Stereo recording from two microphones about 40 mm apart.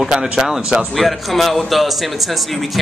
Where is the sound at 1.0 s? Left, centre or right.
Centre.